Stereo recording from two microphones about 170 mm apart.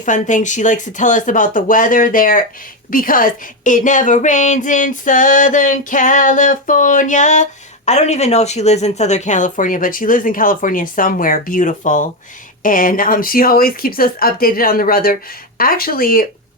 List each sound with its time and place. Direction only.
0.0 s speech: 45° left (ahead or behind)